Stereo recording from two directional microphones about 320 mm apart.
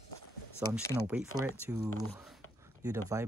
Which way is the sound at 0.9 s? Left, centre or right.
Centre.